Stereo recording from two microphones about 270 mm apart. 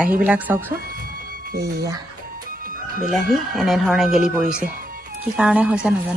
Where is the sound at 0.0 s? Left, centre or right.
Centre.